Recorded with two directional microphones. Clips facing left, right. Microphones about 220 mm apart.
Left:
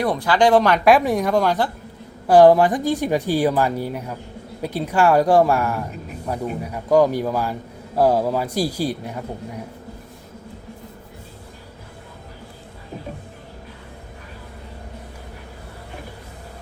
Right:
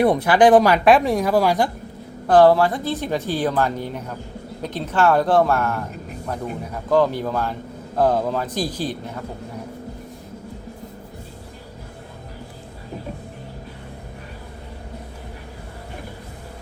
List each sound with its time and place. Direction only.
0.0 s speech: 20° right (ahead or behind)
0.6 s a woman's voice: 5° right (ahead or behind)
2.2 s speech: 15° left (ahead or behind)